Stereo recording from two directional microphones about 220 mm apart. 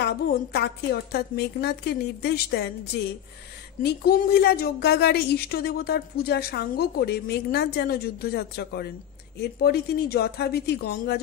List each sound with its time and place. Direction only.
0.0 s a woman's voice: 45° left (ahead or behind)